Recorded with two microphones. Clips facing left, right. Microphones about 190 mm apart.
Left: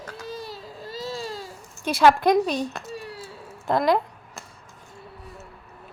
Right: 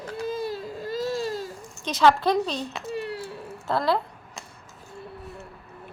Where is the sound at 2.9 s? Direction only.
60° right (ahead or behind).